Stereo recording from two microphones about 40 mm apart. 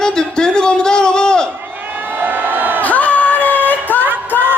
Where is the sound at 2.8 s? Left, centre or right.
Left.